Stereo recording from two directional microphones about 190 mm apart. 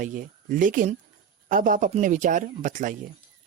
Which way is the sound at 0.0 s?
45° right (ahead or behind).